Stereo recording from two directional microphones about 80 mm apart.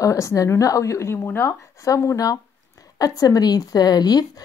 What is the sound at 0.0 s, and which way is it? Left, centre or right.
Speech, left.